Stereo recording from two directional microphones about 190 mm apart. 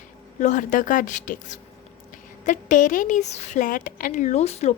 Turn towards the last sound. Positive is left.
turn(degrees=35)  # may be behind; listen again after turning